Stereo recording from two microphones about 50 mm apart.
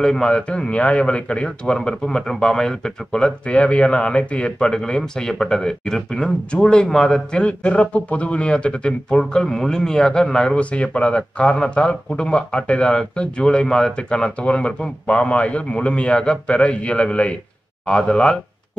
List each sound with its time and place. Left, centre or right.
0.0 s speech: centre
7.4 s speech: left